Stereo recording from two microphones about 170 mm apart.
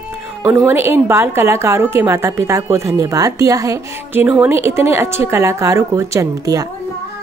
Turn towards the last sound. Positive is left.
turn(degrees=-20)  # may be behind; listen again after turning